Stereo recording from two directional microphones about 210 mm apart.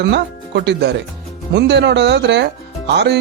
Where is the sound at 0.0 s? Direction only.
55° right (ahead or behind).